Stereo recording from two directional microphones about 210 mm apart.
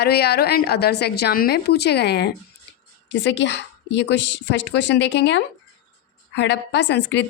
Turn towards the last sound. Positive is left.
turn(degrees=55)  # may be behind; listen again after turning